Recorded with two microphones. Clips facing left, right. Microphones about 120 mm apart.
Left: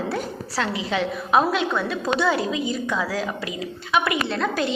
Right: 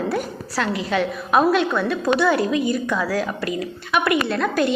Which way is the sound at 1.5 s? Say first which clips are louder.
Right 4 dB; 55° right (ahead or behind).